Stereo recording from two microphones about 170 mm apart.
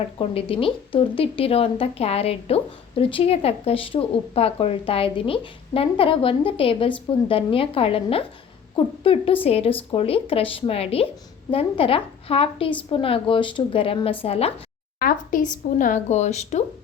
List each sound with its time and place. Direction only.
0.2 s a woman's voice: 35° left (ahead or behind)
14.9 s speech: 55° left (ahead or behind)